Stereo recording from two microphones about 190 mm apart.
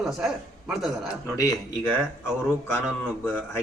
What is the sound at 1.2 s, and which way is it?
Speech, 15° left (ahead or behind).